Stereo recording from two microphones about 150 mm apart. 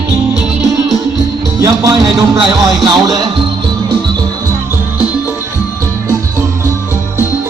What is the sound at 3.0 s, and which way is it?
Speech, 25° right (ahead or behind).